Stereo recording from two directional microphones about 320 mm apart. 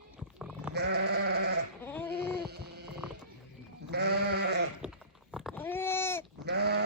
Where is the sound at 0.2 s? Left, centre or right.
Centre.